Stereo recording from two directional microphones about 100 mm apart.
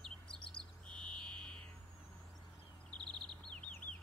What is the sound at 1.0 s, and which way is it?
Buzzer, 55° right (ahead or behind).